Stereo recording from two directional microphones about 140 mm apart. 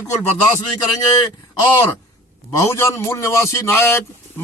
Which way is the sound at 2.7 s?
20° left (ahead or behind).